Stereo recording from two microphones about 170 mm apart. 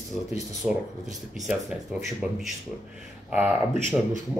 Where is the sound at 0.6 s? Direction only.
Centre (ahead or behind).